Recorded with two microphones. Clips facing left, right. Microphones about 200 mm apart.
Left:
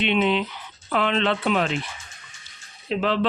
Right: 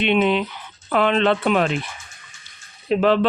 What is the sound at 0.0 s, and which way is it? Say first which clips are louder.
Speech: right 3 dB; 50° right (ahead or behind).